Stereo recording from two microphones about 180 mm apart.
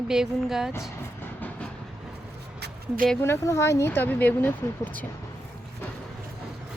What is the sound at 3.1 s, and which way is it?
Speech, 10° left (ahead or behind).